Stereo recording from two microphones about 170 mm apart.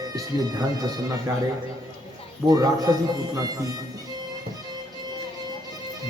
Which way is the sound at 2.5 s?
20° right (ahead or behind).